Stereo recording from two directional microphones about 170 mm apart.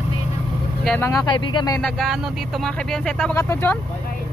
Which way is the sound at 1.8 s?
Centre (ahead or behind).